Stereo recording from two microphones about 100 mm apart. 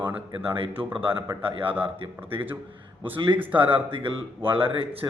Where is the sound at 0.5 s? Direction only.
60° right (ahead or behind).